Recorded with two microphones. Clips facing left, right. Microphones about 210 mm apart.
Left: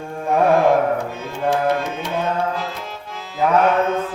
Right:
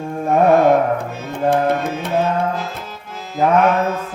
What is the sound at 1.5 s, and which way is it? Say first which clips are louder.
Tabla: right 2 dB; 55° right (ahead or behind).